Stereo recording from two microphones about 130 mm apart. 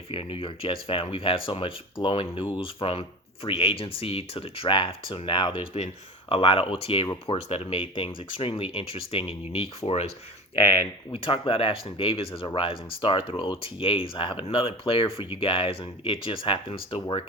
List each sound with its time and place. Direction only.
0.1 s speech: 45° left (ahead or behind)